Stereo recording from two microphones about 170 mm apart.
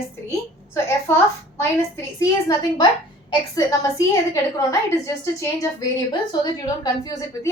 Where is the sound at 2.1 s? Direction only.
20° left (ahead or behind).